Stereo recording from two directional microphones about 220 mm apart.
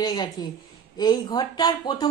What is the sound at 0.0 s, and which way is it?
Speech, 20° left (ahead or behind).